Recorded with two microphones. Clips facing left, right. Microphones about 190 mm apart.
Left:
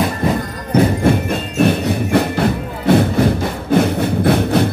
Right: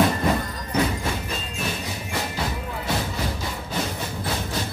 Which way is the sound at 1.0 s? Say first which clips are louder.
Left 13 dB; 60° left (ahead or behind).